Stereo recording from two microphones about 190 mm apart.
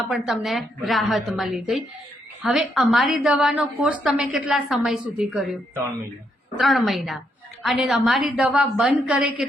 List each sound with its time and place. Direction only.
0.1 s a woman's voice: centre (ahead or behind)